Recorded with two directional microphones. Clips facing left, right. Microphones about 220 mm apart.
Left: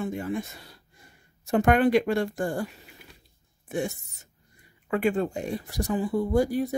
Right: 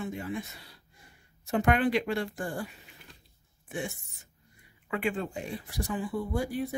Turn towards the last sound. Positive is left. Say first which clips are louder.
# left 7 dB
turn(degrees=40)  # may be behind; listen again after turning